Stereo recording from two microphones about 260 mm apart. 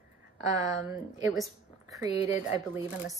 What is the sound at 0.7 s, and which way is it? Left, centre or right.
A woman's voice, centre.